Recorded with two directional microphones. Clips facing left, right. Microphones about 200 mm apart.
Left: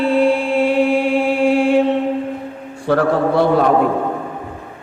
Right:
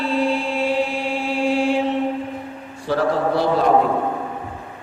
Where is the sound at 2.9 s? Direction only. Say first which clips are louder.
Left 4 dB; 55° left (ahead or behind).